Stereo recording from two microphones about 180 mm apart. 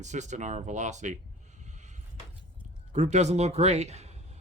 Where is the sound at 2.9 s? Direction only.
40° right (ahead or behind).